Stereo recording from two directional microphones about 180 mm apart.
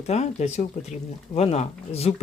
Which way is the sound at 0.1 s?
40° left (ahead or behind).